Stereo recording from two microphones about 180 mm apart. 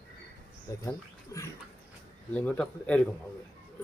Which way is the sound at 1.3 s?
15° left (ahead or behind).